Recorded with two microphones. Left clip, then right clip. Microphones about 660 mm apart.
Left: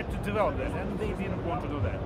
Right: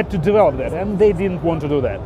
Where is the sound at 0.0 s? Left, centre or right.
Right.